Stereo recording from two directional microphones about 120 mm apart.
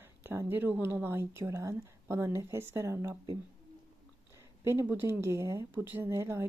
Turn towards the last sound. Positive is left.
turn(degrees=-20)  # may be behind; listen again after turning